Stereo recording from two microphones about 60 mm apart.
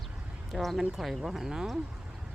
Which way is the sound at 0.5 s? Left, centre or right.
Centre.